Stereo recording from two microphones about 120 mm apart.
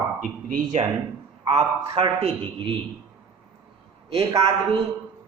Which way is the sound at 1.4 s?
60° right (ahead or behind).